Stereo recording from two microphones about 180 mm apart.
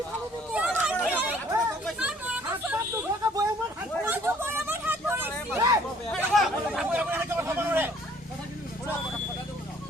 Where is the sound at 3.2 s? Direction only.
20° right (ahead or behind).